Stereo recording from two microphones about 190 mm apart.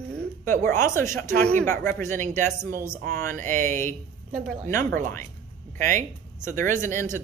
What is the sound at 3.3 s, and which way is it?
Speech, 45° right (ahead or behind).